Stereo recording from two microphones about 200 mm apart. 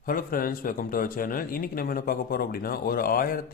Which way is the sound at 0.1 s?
45° left (ahead or behind).